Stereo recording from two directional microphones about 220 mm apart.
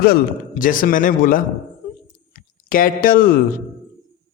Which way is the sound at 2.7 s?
40° left (ahead or behind).